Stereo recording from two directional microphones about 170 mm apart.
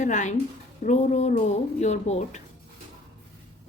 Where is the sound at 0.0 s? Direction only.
45° left (ahead or behind).